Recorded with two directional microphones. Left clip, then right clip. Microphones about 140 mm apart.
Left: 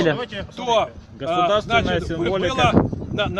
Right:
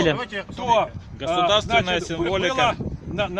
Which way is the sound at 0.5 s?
Centre (ahead or behind).